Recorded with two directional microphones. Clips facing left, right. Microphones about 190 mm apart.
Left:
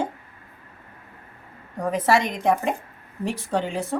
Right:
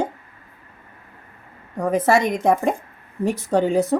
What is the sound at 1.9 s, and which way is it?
A woman's voice, 45° right (ahead or behind).